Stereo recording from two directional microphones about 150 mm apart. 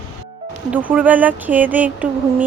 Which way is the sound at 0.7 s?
10° right (ahead or behind).